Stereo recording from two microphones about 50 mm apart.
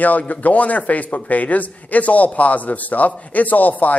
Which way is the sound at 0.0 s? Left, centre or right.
Left.